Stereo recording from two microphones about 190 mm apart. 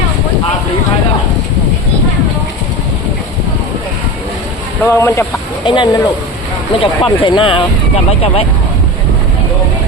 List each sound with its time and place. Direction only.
4.8 s speech: 15° left (ahead or behind)
5.6 s speech: 25° left (ahead or behind)